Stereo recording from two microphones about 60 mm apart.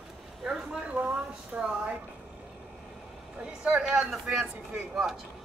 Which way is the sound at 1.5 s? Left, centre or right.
Right.